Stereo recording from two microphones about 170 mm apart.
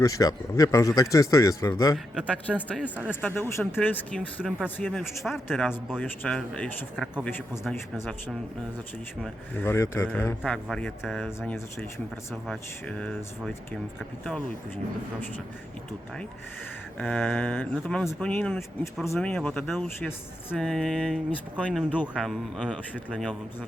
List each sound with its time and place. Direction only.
0.0 s speech: 20° left (ahead or behind)
2.8 s speech: 10° right (ahead or behind)
3.1 s speech: 10° left (ahead or behind)
4.4 s speech: 5° right (ahead or behind)
4.8 s speech: 5° left (ahead or behind)
7.3 s speech: 10° left (ahead or behind)
9.2 s speech: 10° left (ahead or behind)
11.3 s speech: 15° left (ahead or behind)
12.3 s speech: 5° left (ahead or behind)
17.0 s speech: 5° left (ahead or behind)
19.0 s speech: 15° left (ahead or behind)
19.3 s speech: 5° left (ahead or behind)